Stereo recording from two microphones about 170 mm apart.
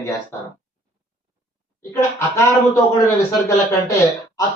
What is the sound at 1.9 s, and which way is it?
Speech, 15° left (ahead or behind).